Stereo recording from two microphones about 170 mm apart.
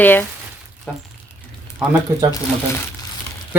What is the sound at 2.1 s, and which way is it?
Speech, 15° right (ahead or behind).